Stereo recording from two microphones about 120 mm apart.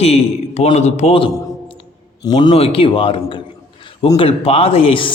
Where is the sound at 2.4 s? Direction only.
50° left (ahead or behind).